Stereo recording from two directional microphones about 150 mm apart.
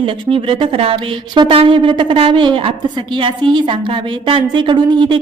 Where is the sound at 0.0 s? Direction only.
35° right (ahead or behind).